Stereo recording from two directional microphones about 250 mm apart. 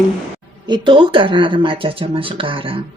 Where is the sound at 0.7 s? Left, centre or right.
Centre.